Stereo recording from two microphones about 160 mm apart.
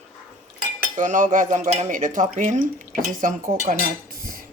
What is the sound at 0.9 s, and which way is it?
Speech, 50° right (ahead or behind).